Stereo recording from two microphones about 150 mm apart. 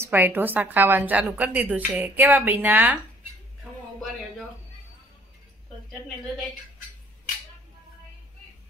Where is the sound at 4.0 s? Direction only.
Centre (ahead or behind).